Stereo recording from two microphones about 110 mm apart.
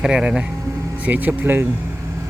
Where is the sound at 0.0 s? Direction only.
10° right (ahead or behind).